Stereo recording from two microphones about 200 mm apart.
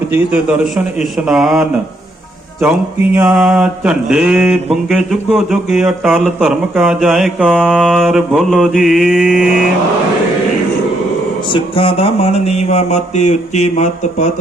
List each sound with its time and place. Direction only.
0.9 s mantra: centre (ahead or behind)
3.1 s mantra: 5° right (ahead or behind)
11.5 s a sound: 25° left (ahead or behind)